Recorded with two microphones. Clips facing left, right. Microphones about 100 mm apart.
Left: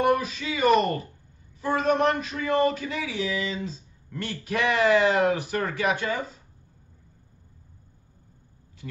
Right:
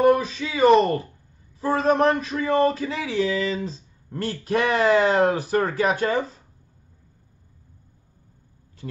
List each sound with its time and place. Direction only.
0.0 s a man's voice: 30° right (ahead or behind)